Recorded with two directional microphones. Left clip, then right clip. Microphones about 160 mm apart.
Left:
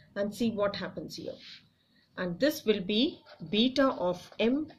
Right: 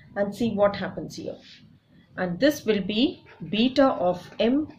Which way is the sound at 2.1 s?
35° left (ahead or behind).